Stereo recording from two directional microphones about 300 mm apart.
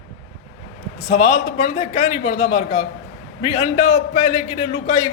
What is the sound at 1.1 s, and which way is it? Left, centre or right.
A man's voice, left.